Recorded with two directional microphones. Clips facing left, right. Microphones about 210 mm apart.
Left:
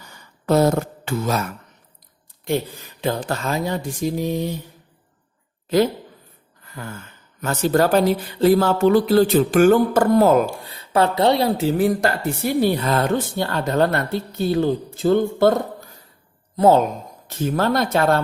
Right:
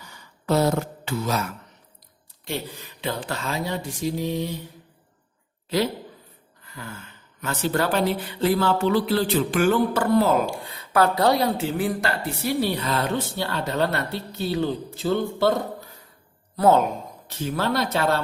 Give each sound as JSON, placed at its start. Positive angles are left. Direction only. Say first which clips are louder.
{"t": 0.0, "sound": "a sound", "louder": "left 3 dB", "side_deg": 45}
{"t": 3.0, "sound": "a woman's voice", "louder": "left 6 dB", "side_deg": 45}
{"t": 5.6, "sound": "a woman's voice", "louder": "left 6 dB", "side_deg": 50}
{"t": 7.4, "sound": "a woman's voice", "louder": "left 6 dB", "side_deg": 45}
{"t": 10.8, "sound": "a woman's voice", "louder": "left 2 dB", "side_deg": 25}
{"t": 16.6, "sound": "a woman's voice", "louder": "left 3 dB", "side_deg": 25}
{"t": 17.2, "sound": "a woman's voice", "louder": "left 5 dB", "side_deg": 50}